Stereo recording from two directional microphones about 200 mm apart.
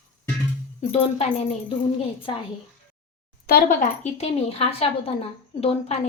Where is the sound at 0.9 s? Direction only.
30° left (ahead or behind).